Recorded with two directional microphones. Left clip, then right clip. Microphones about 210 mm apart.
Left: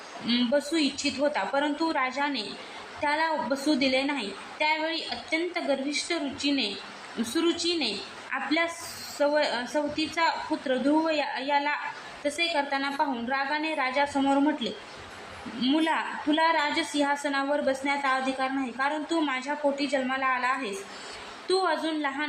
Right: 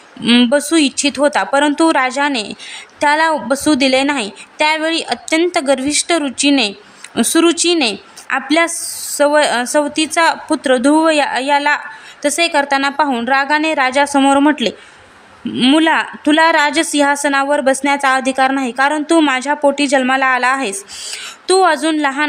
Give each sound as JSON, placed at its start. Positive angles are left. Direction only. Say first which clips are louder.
{"t": 0.3, "sound": "a woman's voice", "louder": "right 14 dB", "side_deg": -60}